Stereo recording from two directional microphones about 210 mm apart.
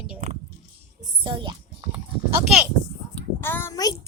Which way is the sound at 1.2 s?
25° right (ahead or behind).